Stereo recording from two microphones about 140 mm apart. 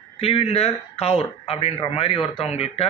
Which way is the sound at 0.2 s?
45° left (ahead or behind).